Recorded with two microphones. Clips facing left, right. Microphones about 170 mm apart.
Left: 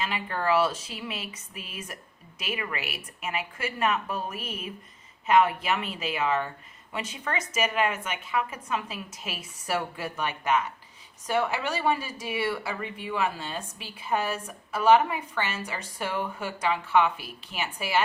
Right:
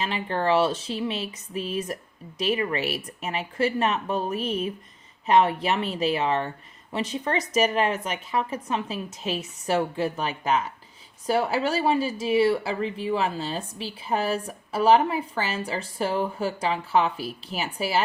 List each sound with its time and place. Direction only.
0.0 s speech: 30° right (ahead or behind)